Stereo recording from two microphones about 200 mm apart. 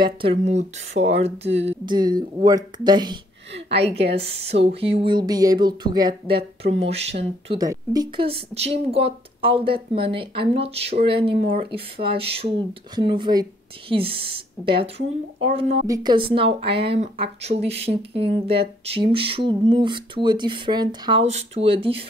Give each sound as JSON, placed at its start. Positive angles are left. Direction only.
{"t": 0.0, "sound": "speech", "side_deg": -25}
{"t": 7.4, "sound": "speech", "side_deg": -20}
{"t": 21.3, "sound": "speech", "side_deg": -30}